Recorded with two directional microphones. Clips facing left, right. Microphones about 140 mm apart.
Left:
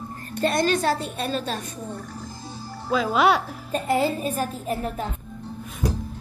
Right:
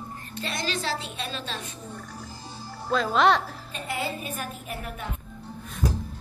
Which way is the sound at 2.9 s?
5° left (ahead or behind).